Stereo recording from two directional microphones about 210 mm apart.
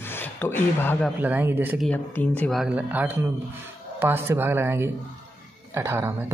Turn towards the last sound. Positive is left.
turn(degrees=-10)  # may be behind; listen again after turning